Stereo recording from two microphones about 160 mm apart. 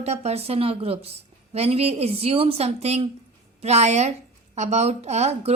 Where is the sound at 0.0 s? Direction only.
40° right (ahead or behind).